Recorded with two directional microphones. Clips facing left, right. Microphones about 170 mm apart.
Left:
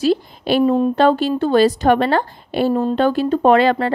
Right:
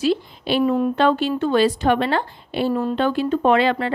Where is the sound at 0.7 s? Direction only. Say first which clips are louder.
Left 3 dB; 30° left (ahead or behind).